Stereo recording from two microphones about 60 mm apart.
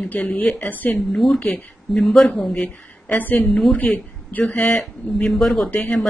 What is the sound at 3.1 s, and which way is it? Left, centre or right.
A woman's voice, left.